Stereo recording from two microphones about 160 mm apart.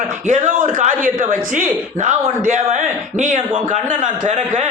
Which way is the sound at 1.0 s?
50° right (ahead or behind).